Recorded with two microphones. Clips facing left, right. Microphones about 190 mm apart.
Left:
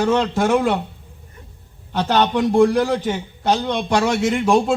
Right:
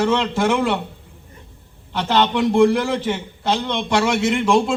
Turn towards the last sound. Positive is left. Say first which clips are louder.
# even
turn(degrees=40)  # may be behind; listen again after turning